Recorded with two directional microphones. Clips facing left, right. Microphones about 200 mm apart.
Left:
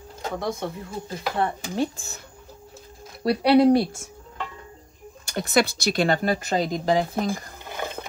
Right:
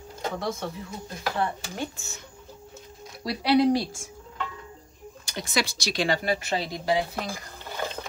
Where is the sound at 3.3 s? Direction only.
55° left (ahead or behind).